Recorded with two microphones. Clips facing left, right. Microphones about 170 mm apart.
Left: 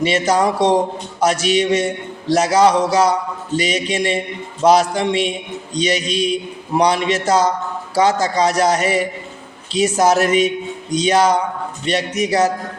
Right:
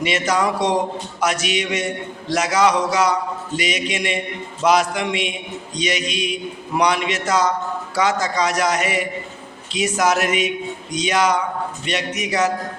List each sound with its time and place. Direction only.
0.0 s a man's voice: 30° left (ahead or behind)